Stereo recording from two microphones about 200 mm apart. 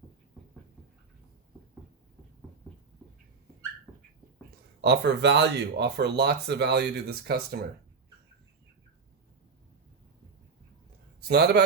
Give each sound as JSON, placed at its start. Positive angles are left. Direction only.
{"t": 3.9, "sound": "dog", "side_deg": -5}
{"t": 4.8, "sound": "speech", "side_deg": -60}
{"t": 11.2, "sound": "a man's voice", "side_deg": -55}